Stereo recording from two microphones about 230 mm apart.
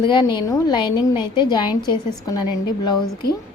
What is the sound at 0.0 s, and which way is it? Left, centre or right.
A woman's voice, centre.